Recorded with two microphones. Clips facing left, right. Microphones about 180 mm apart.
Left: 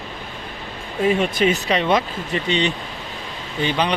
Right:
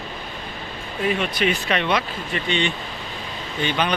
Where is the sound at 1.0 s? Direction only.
25° left (ahead or behind).